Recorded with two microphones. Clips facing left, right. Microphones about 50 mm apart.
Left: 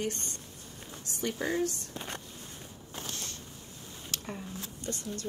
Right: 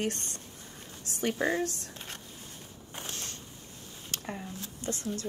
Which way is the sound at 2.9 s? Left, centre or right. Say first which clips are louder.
Even; right.